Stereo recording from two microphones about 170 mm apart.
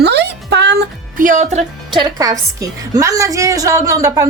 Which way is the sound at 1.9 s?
25° right (ahead or behind).